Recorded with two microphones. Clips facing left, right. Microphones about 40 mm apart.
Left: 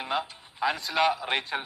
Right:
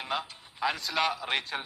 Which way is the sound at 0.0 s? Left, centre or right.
Centre.